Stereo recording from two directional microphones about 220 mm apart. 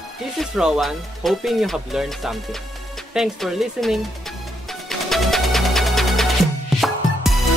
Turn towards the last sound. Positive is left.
turn(degrees=0)  # may be behind; listen again after turning